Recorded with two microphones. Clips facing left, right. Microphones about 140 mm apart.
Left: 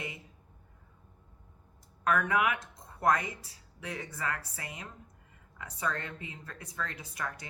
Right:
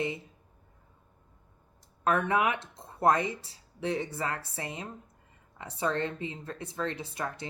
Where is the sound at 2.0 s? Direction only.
30° right (ahead or behind).